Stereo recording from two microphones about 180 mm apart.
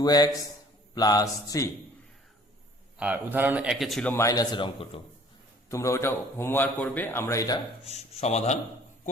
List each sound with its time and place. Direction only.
0.0 s a man's voice: 20° left (ahead or behind)
3.0 s a man's voice: 10° right (ahead or behind)
4.1 s a man's voice: 15° left (ahead or behind)
7.9 s speech: 35° left (ahead or behind)